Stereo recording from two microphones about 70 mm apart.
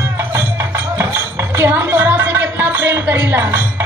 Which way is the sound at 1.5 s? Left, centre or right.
Right.